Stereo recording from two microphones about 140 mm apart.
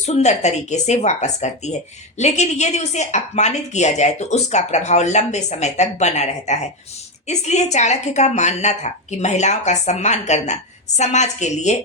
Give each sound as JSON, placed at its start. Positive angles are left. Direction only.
{"t": 0.0, "sound": "a woman's voice", "side_deg": 55}